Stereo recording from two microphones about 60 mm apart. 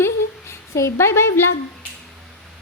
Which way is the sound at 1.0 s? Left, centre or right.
Left.